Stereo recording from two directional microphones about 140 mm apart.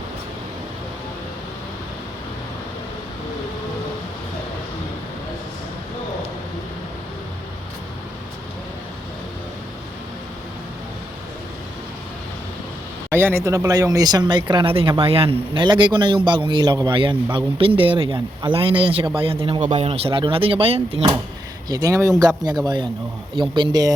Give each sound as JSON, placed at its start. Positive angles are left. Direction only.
{"t": 13.1, "sound": "speech", "side_deg": -15}
{"t": 21.7, "sound": "speech", "side_deg": -25}